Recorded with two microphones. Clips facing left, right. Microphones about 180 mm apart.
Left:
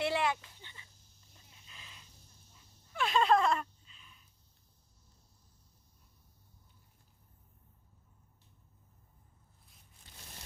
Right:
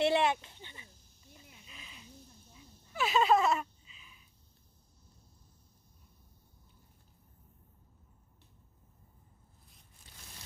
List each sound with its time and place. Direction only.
0.0 s speech: 25° right (ahead or behind)
1.6 s a sound: 5° right (ahead or behind)
2.9 s gasp: 5° right (ahead or behind)